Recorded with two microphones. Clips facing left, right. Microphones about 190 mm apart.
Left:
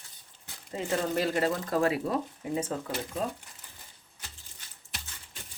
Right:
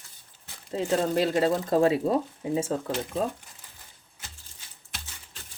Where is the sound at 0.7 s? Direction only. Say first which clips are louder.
Right 5 dB; 25° right (ahead or behind).